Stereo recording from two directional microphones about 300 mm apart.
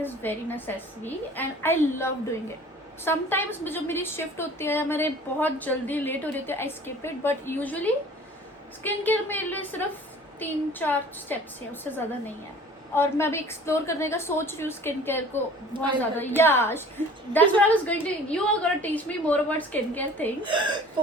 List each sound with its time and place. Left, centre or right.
0.0 s a woman's voice: centre
15.7 s speech: centre
16.1 s a woman's voice: centre
20.4 s speech: centre